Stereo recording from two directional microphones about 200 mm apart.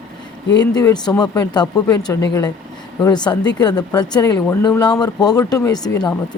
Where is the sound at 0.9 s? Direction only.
20° left (ahead or behind).